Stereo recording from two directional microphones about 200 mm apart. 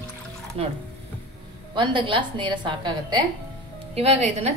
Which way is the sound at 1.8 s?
25° right (ahead or behind).